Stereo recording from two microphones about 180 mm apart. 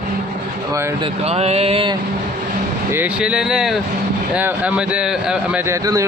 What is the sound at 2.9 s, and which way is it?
Speech, 10° right (ahead or behind).